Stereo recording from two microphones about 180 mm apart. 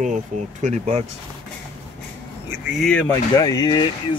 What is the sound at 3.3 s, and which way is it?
Speech, 20° left (ahead or behind).